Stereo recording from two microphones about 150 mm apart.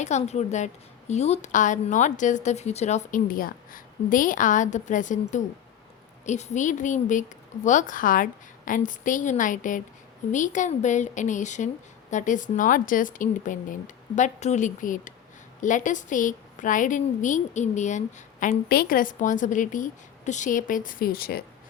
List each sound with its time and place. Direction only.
0.0 s a woman's voice: 50° left (ahead or behind); by 21.4 s 90° left